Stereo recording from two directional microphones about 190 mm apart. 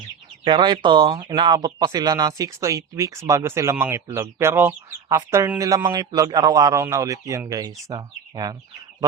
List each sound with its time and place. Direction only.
0.4 s speech: 25° right (ahead or behind)